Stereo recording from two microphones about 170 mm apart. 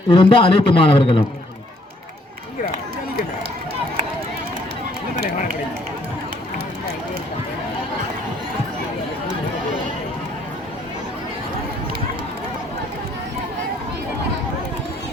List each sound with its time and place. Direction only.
0.1 s a man's voice: 30° left (ahead or behind)